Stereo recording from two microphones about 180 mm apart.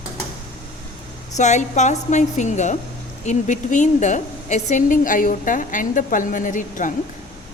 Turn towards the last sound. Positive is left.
turn(degrees=45)  # may be behind; listen again after turning